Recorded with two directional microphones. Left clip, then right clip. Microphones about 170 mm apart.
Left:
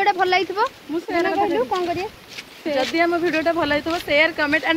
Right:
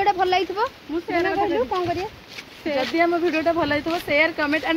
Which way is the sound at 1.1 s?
90° left.